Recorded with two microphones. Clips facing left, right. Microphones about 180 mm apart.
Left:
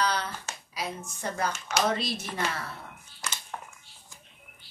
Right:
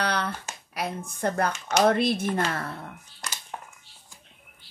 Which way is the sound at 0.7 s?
55° right (ahead or behind).